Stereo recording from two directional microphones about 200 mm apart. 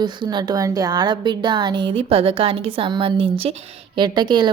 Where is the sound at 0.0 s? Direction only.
20° right (ahead or behind).